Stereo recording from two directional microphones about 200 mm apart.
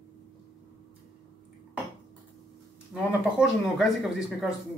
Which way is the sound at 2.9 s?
5° right (ahead or behind).